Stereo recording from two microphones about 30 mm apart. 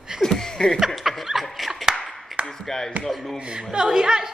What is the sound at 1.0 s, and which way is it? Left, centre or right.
Speech, centre.